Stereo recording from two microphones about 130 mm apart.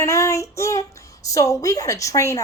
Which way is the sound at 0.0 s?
20° left (ahead or behind).